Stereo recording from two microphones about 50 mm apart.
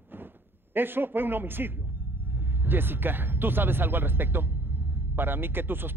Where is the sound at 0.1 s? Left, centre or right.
Right.